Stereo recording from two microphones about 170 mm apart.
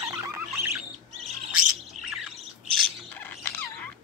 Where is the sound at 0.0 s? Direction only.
15° right (ahead or behind).